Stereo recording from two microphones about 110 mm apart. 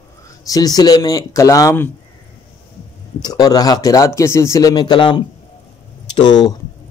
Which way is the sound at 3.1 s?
35° left (ahead or behind).